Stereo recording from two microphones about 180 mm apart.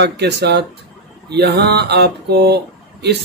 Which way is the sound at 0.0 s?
70° right (ahead or behind).